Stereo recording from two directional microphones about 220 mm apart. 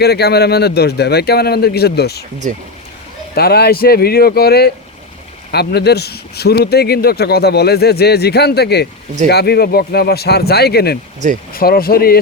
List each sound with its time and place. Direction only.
0.0 s speech: 45° left (ahead or behind)
3.3 s speech: 45° left (ahead or behind)